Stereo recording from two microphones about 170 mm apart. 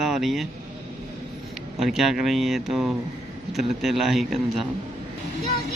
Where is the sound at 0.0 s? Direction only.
Centre (ahead or behind).